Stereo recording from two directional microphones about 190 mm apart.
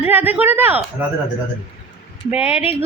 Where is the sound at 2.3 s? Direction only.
10° right (ahead or behind).